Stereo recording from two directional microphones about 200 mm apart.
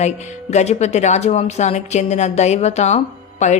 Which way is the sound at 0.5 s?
35° left (ahead or behind).